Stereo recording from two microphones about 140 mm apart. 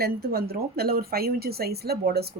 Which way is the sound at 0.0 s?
90° right.